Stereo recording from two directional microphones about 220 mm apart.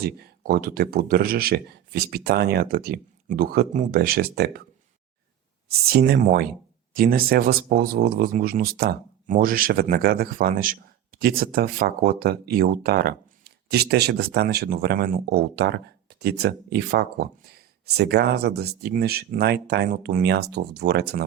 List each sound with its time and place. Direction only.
0.0 s speech: 45° right (ahead or behind)
5.9 s speech: 45° right (ahead or behind)